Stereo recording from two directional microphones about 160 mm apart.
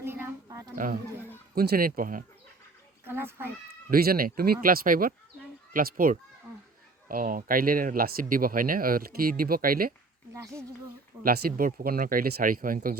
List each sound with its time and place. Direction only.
0.0 s a sound: 15° right (ahead or behind)
1.5 s speech: 70° right (ahead or behind)
3.1 s a child's voice: 15° right (ahead or behind)
3.8 s speech: 65° right (ahead or behind)
10.3 s speech: 20° right (ahead or behind)
11.2 s speech: 65° right (ahead or behind)